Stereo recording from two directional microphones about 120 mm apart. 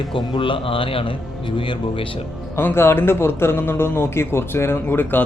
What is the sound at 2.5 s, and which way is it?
A man's voice, 20° left (ahead or behind).